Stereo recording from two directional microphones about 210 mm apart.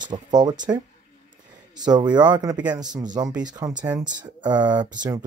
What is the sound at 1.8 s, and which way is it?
Speech, 20° right (ahead or behind).